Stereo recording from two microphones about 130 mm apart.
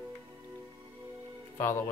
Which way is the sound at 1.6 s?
20° left (ahead or behind).